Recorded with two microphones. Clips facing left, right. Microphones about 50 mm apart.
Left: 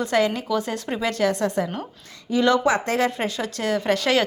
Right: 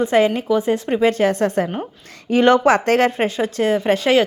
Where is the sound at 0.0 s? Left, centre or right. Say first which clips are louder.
Right 5 dB; right.